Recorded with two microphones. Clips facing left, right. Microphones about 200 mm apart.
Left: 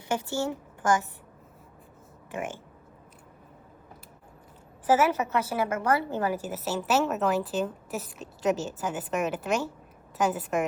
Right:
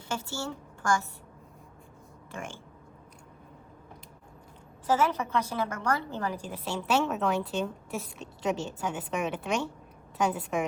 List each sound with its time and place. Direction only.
0.1 s a woman's voice: 20° left (ahead or behind)
4.9 s a woman's voice: 10° left (ahead or behind)